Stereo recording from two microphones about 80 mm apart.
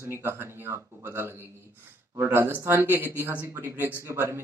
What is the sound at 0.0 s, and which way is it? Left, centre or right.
Speech, right.